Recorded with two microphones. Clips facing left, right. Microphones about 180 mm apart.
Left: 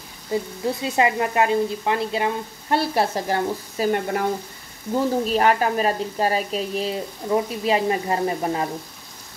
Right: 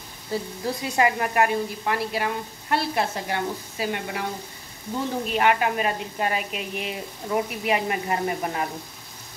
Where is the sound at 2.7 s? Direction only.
35° left (ahead or behind).